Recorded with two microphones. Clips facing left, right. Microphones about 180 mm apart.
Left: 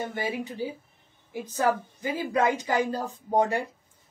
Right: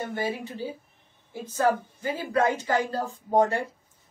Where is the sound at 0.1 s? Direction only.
15° left (ahead or behind).